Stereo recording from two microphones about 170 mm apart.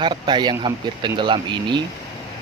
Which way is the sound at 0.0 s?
25° right (ahead or behind).